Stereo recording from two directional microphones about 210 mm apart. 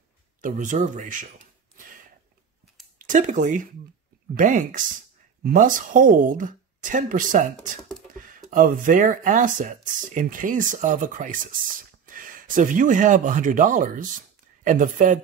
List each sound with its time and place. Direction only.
0.4 s speech: 35° right (ahead or behind)
3.0 s speech: 35° right (ahead or behind)